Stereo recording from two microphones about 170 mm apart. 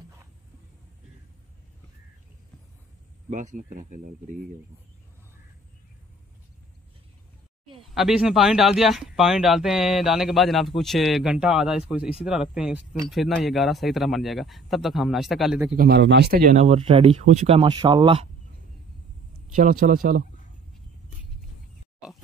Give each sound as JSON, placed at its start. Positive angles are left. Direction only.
{"t": 3.3, "sound": "speech", "side_deg": -50}
{"t": 7.9, "sound": "speech", "side_deg": -5}
{"t": 15.7, "sound": "speech", "side_deg": -65}
{"t": 16.5, "sound": "speech", "side_deg": -40}
{"t": 17.6, "sound": "speech", "side_deg": -25}
{"t": 19.5, "sound": "speech", "side_deg": -50}